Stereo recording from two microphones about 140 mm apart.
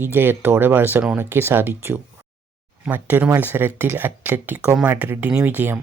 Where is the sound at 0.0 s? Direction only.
15° right (ahead or behind).